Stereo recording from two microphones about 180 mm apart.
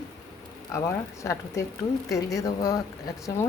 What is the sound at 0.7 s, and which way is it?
A woman's voice, 15° left (ahead or behind).